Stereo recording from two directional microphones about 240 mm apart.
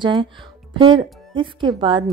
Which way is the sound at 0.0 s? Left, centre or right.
Centre.